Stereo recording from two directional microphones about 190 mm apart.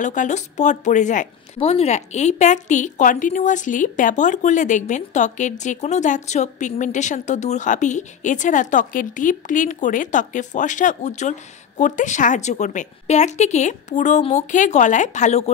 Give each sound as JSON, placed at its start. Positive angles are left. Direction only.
{"t": 0.0, "sound": "a woman's voice", "side_deg": 40}